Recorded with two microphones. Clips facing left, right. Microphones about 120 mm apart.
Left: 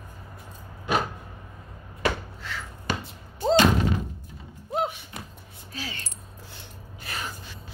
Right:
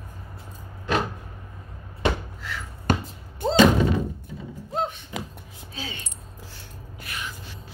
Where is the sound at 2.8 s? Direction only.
50° right (ahead or behind).